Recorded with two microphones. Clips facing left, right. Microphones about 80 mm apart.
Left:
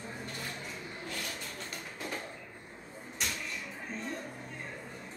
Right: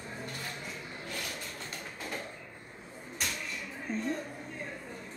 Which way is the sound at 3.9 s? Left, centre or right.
Centre.